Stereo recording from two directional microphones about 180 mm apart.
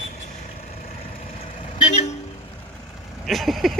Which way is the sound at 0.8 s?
35° left (ahead or behind).